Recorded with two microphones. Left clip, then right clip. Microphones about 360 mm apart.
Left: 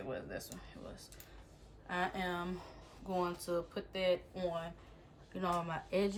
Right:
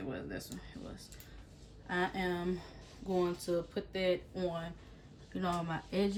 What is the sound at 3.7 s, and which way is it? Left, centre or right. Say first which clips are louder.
Speech: right 1 dB; left.